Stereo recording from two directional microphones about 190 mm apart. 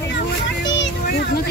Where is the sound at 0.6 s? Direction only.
70° left (ahead or behind).